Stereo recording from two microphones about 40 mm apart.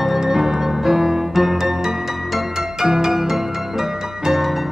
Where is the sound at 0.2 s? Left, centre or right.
Centre.